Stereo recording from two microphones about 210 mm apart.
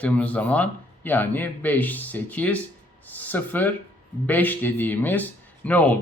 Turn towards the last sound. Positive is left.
turn(degrees=5)  # may be behind; listen again after turning